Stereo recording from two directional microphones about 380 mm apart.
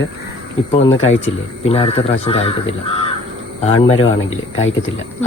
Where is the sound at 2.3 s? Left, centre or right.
Centre.